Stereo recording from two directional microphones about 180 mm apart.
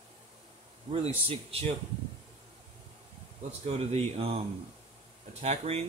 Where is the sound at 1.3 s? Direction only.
30° right (ahead or behind).